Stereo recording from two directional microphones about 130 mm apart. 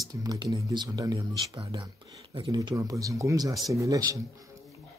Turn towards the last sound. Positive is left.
turn(degrees=-25)  # may be behind; listen again after turning